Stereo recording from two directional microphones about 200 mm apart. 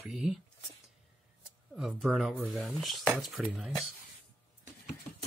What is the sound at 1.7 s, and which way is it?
Speech, 5° right (ahead or behind).